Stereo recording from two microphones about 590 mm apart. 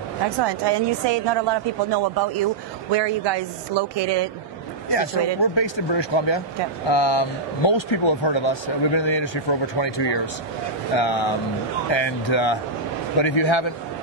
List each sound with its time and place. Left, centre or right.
0.4 s a woman's voice: right
4.9 s speech: left